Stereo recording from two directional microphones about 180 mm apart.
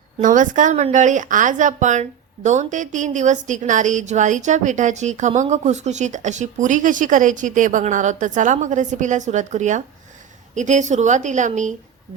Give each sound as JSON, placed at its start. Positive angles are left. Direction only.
{"t": 0.2, "sound": "speech", "side_deg": -45}